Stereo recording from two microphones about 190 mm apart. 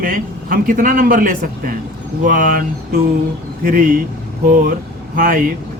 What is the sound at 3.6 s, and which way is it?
Speech, 45° right (ahead or behind).